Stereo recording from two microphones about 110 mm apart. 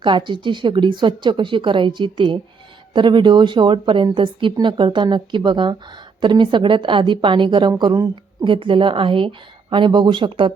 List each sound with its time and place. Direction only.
0.0 s a woman's voice: 45° right (ahead or behind)
8.4 s a woman's voice: 50° right (ahead or behind)